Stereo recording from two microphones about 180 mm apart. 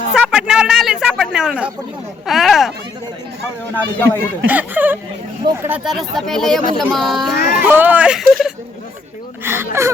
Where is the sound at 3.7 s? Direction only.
10° left (ahead or behind).